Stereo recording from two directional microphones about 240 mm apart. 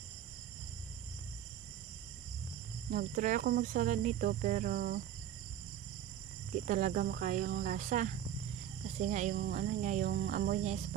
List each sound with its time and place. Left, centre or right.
2.9 s speech: right
6.7 s speech: right